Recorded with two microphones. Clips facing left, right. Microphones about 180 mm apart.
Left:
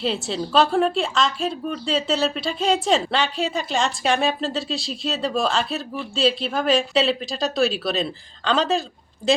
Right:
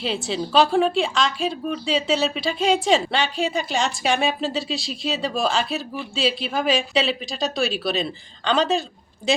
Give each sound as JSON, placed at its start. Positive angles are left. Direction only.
{"t": 0.0, "sound": "speech", "side_deg": 0}